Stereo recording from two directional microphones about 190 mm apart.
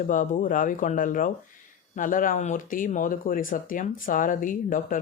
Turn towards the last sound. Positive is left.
turn(degrees=45)  # may be behind; listen again after turning